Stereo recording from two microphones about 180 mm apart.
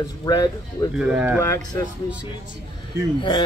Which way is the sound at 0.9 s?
5° right (ahead or behind).